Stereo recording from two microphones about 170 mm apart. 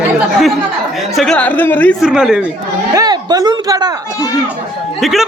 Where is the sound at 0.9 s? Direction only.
Centre (ahead or behind).